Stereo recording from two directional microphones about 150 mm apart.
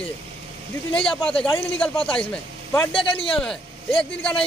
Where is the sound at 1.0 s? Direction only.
5° left (ahead or behind).